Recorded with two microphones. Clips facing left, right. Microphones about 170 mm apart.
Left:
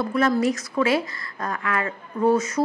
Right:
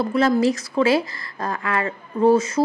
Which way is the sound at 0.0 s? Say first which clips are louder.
Right 3 dB; 30° right (ahead or behind).